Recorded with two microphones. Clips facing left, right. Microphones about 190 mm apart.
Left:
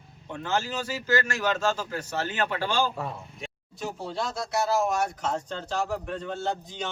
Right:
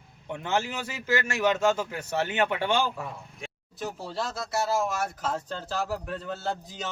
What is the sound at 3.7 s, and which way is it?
A man's voice, centre (ahead or behind).